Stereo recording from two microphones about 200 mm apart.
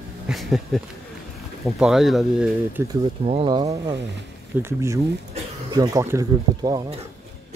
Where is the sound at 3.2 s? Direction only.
30° right (ahead or behind).